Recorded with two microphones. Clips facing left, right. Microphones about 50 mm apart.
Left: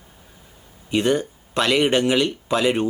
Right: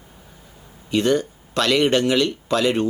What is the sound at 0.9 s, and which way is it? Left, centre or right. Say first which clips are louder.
Speech: right 1 dB; centre.